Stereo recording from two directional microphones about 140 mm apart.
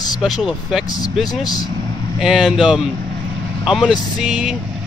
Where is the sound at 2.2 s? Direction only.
Centre (ahead or behind).